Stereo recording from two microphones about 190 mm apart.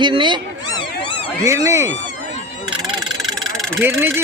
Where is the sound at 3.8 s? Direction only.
10° right (ahead or behind).